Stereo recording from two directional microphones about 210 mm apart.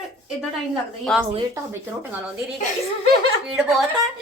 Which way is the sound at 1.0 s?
Centre (ahead or behind).